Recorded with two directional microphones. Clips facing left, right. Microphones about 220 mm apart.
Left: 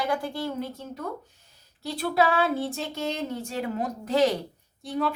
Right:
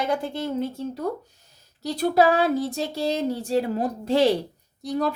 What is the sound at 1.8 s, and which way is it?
Speech, 40° right (ahead or behind).